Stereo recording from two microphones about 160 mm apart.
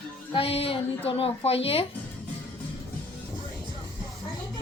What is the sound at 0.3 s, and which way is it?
Speech, 35° left (ahead or behind).